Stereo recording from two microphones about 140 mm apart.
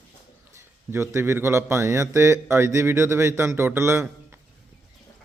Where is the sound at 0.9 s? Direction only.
15° right (ahead or behind).